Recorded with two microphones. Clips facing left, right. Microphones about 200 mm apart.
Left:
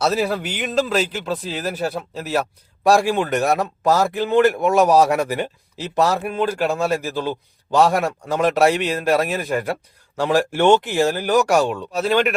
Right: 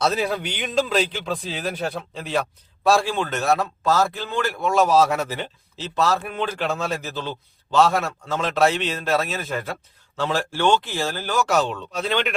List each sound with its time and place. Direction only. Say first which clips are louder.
0.0 s speech: left 2 dB; 5° left (ahead or behind)